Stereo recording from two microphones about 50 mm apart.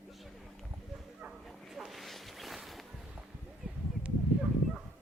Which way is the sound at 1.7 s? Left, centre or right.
Centre.